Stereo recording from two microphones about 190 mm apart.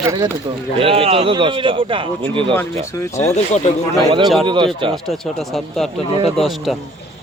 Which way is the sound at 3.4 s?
35° left (ahead or behind).